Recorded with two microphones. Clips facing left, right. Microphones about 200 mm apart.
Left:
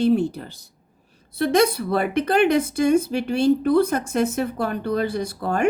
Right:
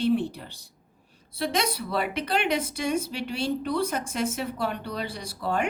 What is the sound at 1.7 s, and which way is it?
A woman's voice, 50° left (ahead or behind).